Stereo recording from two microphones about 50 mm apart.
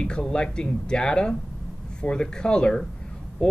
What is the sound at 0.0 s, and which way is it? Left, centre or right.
Speech, centre.